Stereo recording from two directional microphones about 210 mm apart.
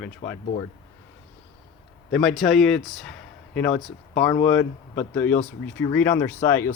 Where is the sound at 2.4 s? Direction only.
Centre (ahead or behind).